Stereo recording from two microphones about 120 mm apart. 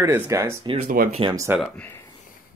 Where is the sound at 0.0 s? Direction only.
25° right (ahead or behind).